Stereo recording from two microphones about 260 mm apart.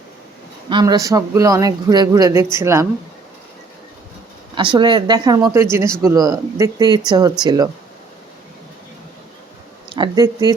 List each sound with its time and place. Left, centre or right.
0.7 s speech: centre
4.5 s speech: centre
9.9 s speech: centre